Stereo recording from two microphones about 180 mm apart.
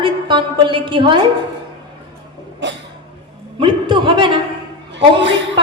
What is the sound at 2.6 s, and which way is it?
Speech, 75° right (ahead or behind).